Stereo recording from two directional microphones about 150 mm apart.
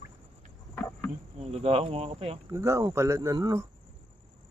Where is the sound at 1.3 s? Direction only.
45° right (ahead or behind).